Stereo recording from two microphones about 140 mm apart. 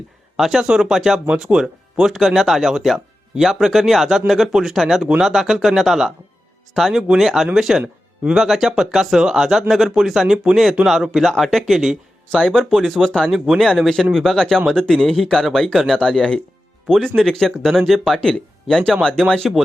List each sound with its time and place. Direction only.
0.3 s speech: centre (ahead or behind)